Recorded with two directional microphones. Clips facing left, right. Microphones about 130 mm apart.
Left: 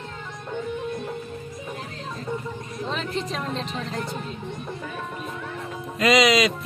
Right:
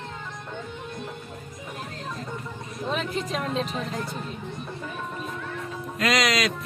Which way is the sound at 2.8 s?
5° right (ahead or behind).